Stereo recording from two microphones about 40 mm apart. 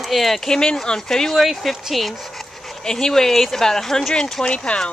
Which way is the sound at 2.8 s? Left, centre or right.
Centre.